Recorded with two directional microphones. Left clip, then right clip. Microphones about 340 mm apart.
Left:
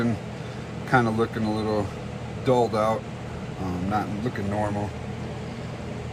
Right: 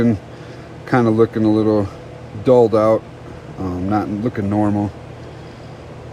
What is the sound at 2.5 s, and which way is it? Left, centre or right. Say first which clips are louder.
Speech: right 10 dB; right.